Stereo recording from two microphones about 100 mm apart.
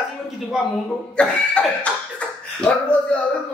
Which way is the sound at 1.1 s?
10° left (ahead or behind).